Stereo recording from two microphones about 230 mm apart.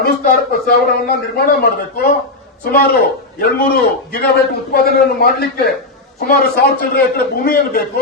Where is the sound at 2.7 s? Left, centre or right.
Left.